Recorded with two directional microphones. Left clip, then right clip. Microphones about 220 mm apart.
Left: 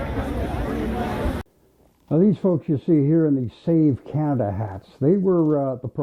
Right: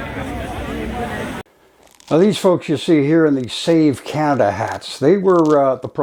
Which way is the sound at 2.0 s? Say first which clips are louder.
Right 7 dB; 10° right (ahead or behind).